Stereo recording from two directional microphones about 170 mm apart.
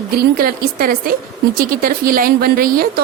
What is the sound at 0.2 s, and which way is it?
A woman's voice, 60° right (ahead or behind).